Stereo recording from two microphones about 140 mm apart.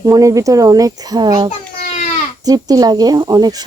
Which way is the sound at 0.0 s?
25° right (ahead or behind).